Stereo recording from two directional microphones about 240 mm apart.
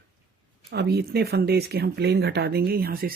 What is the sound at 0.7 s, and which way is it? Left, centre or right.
Speech, right.